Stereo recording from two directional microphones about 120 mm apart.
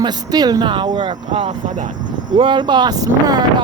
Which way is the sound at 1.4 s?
90° right.